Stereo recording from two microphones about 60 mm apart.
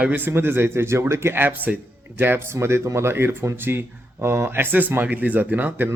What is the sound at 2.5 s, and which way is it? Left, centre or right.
Speech, right.